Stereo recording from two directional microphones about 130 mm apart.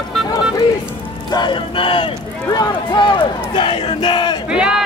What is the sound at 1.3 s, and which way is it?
Speech, 35° left (ahead or behind).